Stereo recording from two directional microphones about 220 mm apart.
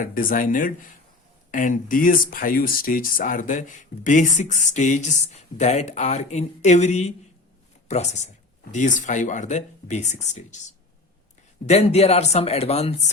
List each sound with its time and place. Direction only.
0.0 s speech: 40° left (ahead or behind)